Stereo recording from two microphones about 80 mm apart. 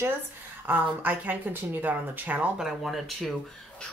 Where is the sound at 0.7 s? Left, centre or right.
Right.